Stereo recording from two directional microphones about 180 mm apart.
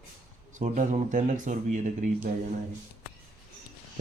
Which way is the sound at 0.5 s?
45° right (ahead or behind).